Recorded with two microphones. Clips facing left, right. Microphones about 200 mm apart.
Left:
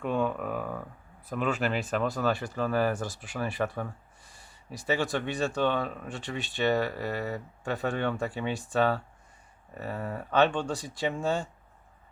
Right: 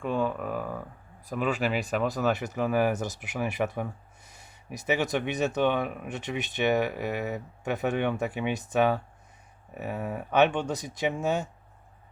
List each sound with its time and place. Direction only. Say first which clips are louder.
0.0 s speech: even; centre (ahead or behind)
2.3 s speech: right 2 dB; 20° right (ahead or behind)